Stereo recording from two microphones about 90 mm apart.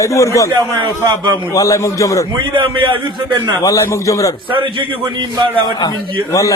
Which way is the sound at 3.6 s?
35° left (ahead or behind).